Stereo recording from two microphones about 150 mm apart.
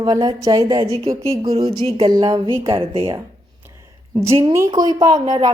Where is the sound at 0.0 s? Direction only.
30° right (ahead or behind).